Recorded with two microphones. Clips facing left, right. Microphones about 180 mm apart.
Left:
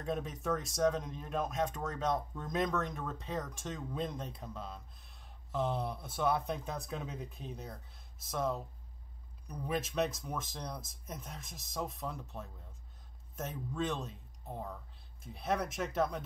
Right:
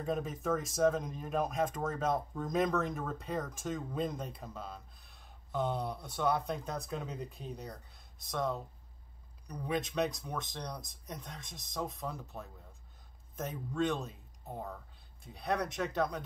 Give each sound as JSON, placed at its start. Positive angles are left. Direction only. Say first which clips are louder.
{"t": 0.0, "sound": "speech", "louder": "right 2 dB", "side_deg": 0}